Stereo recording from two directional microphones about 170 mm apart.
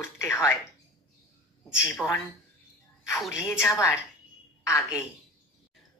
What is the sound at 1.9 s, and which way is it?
Speech, 15° left (ahead or behind).